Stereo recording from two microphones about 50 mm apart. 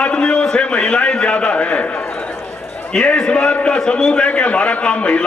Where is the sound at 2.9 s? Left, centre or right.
Centre.